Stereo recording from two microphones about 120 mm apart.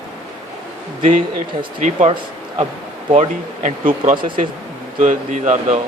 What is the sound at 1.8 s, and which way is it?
Speech, 75° right (ahead or behind).